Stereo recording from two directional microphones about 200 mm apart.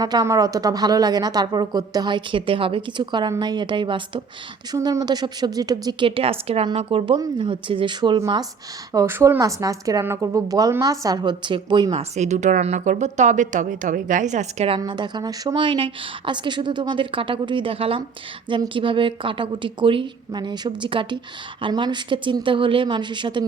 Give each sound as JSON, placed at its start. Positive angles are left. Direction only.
{"t": 0.0, "sound": "a woman's voice", "side_deg": -20}
{"t": 14.8, "sound": "a woman's voice", "side_deg": -20}